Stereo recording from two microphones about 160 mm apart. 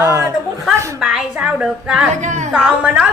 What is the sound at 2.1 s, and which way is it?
Speech, 50° right (ahead or behind).